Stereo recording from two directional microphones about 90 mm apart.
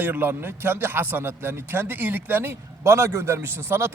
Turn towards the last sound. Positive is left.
turn(degrees=-30)  # may be behind; listen again after turning